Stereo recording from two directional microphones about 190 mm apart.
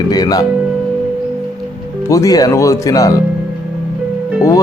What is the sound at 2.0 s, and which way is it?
Speech, 15° left (ahead or behind).